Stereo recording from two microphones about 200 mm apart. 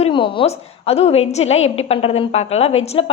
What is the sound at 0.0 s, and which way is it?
A woman's voice, 25° left (ahead or behind).